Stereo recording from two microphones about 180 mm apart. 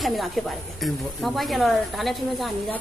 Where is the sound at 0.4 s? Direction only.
Centre (ahead or behind).